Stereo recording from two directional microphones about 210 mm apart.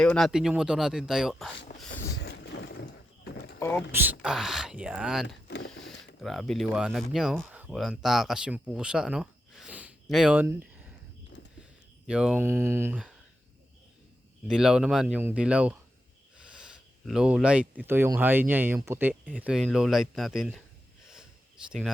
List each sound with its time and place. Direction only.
0.0 s speech: 5° left (ahead or behind)
1.8 s a sound: 5° left (ahead or behind)
2.2 s a sound: 55° left (ahead or behind)
3.6 s speech: 10° left (ahead or behind)
3.9 s speech: 10° right (ahead or behind)
5.5 s speech: 55° left (ahead or behind)
6.2 s speech: centre (ahead or behind)
12.0 s speech: 5° right (ahead or behind)
14.4 s speech: 5° right (ahead or behind)
16.4 s a sound: 5° right (ahead or behind)
17.8 s speech: 10° right (ahead or behind)
21.7 s speech: centre (ahead or behind)